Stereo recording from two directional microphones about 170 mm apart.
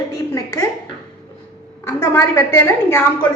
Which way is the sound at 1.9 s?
15° left (ahead or behind).